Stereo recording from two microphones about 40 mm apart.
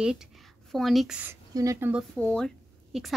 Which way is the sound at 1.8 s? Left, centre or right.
Right.